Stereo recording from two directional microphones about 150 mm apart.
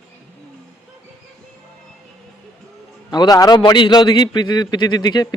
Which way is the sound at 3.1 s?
25° left (ahead or behind).